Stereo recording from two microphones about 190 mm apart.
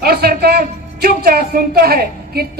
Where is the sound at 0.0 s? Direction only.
55° right (ahead or behind).